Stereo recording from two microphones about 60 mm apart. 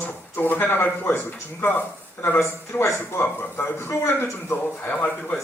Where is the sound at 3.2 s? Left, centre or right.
Left.